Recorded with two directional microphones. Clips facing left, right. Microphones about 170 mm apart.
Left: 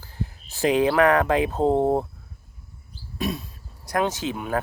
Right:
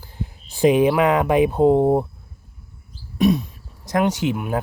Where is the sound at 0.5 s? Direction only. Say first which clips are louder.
Right 4 dB; 15° right (ahead or behind).